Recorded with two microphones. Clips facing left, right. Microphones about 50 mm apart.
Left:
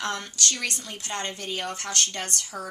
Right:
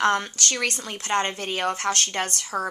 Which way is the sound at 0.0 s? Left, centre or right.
Right.